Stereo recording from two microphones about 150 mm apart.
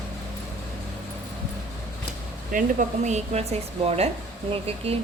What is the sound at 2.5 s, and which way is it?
Speech, 65° right (ahead or behind).